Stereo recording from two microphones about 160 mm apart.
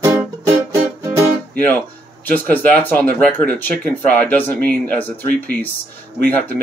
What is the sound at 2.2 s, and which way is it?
Speech, 10° left (ahead or behind).